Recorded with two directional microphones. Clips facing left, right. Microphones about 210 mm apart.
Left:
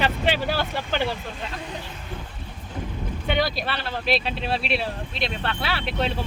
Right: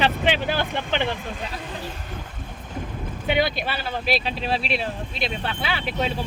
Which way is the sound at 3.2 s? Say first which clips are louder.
Right 2 dB; 5° right (ahead or behind).